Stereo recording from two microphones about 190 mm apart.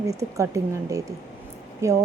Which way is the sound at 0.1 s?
15° right (ahead or behind).